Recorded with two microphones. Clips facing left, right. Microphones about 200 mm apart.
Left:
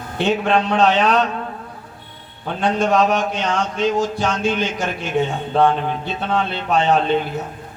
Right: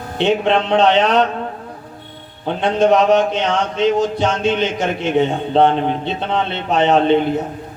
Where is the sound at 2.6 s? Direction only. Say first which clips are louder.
Right 3 dB; 20° right (ahead or behind).